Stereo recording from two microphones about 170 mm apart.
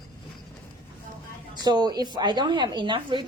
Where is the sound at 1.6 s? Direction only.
25° right (ahead or behind).